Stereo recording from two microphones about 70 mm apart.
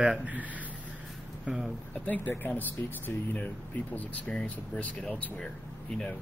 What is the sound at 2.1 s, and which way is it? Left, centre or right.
Speech, left.